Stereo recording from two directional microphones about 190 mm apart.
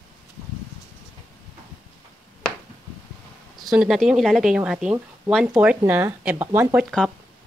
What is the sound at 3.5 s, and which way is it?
Speech, centre (ahead or behind).